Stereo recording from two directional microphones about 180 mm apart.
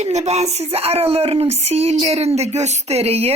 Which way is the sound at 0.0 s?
40° right (ahead or behind).